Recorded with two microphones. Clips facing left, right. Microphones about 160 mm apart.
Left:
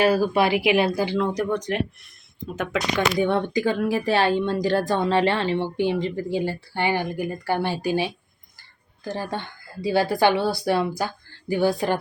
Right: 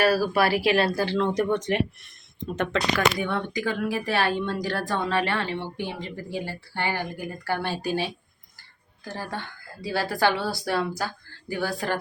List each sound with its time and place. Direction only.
0.0 s speech: 20° left (ahead or behind)
1.6 s speech: centre (ahead or behind)
2.9 s speech: 25° left (ahead or behind)